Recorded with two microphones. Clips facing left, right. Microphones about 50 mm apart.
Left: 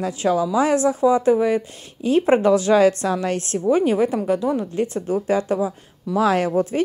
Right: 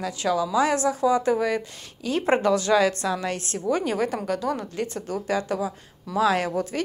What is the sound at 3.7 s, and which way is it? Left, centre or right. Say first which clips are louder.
A woman's voice: left 6 dB; left.